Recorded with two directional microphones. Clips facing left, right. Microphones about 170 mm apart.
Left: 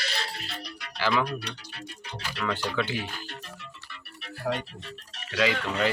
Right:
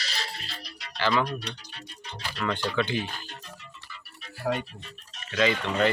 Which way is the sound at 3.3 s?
70° left (ahead or behind).